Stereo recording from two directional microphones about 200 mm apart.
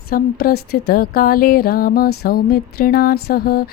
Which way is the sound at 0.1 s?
50° left (ahead or behind).